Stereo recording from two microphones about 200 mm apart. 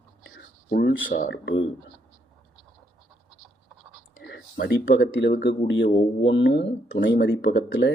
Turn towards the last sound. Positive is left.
turn(degrees=60)  # may be behind; listen again after turning